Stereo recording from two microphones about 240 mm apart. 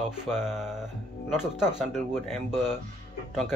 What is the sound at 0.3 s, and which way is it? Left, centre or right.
Speech, centre.